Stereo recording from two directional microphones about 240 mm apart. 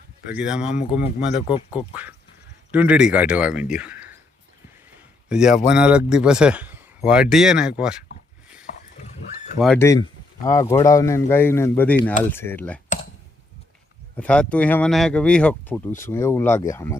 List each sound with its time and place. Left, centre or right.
0.3 s speech: centre
0.8 s speech: left
1.7 s speech: centre
5.3 s speech: centre
9.6 s speech: centre
9.8 s speech: centre
14.2 s speech: centre